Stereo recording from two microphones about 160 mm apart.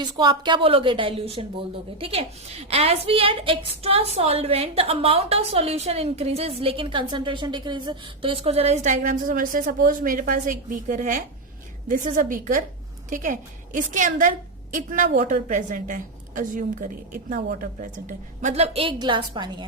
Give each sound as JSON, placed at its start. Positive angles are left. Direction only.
{"t": 0.0, "sound": "a woman's voice", "side_deg": -30}